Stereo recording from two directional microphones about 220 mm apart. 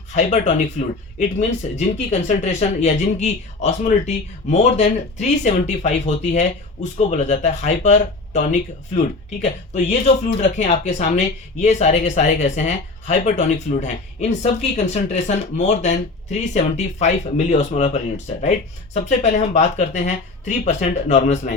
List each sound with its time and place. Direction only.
0.1 s speech: 35° left (ahead or behind)